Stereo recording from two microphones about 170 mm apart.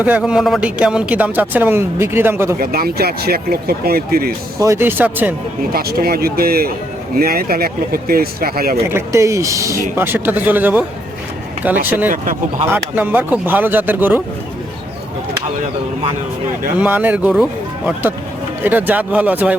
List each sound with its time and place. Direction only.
0.0 s speech: 5° right (ahead or behind)
2.6 s speech: 60° right (ahead or behind)
4.6 s speech: 15° right (ahead or behind)
5.7 s speech: 65° right (ahead or behind)
8.9 s speech: 15° right (ahead or behind)
12.1 s speech: 55° right (ahead or behind)
12.7 s speech: 10° right (ahead or behind)
16.7 s speech: 10° right (ahead or behind)
18.6 s speech: 10° right (ahead or behind)